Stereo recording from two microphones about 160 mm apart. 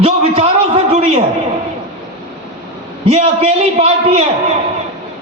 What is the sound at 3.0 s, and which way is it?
A man's voice, 40° right (ahead or behind).